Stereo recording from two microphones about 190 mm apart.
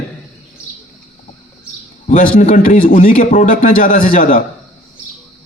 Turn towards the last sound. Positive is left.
turn(degrees=45)  # may be behind; listen again after turning